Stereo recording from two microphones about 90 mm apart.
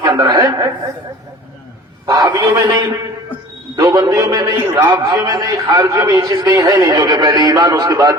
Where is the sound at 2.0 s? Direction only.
40° right (ahead or behind).